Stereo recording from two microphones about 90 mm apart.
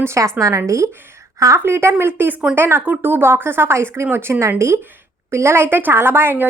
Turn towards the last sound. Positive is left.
turn(degrees=-25)  # may be behind; listen again after turning